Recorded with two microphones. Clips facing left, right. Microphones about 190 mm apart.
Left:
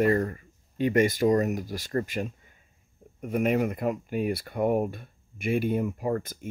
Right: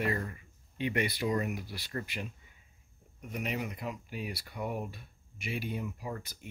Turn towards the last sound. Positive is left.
turn(degrees=50)  # may be behind; listen again after turning